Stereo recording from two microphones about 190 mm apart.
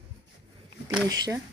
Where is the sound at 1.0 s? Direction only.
20° right (ahead or behind).